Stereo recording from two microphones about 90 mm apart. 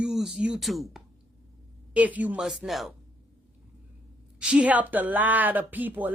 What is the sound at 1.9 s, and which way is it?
Speech, 15° right (ahead or behind).